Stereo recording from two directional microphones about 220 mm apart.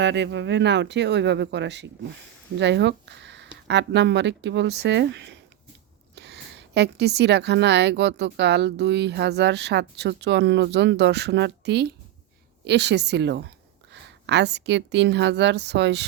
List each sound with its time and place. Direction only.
0.0 s a woman's voice: 55° right (ahead or behind)